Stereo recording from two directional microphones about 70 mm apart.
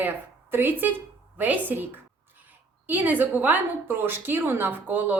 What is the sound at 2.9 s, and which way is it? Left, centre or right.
A woman's voice, right.